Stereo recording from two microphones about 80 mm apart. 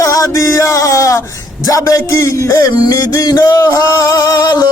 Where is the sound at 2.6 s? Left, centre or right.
Left.